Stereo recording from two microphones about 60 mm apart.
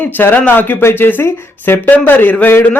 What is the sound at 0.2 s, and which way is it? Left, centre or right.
Speech, left.